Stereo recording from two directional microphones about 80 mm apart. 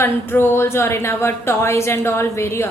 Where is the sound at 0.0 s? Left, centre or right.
Left.